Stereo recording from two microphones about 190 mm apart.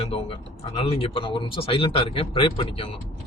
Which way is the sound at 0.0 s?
30° left (ahead or behind).